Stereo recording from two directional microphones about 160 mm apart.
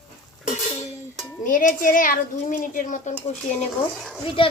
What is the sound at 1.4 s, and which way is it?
Speech, 55° left (ahead or behind).